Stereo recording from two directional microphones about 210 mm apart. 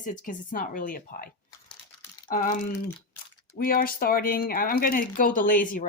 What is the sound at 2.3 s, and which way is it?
Speech, 40° left (ahead or behind).